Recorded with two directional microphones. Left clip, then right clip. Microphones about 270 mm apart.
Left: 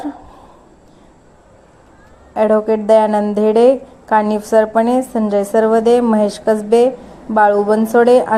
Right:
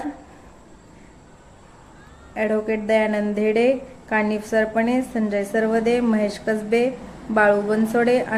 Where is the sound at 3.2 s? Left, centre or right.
Centre.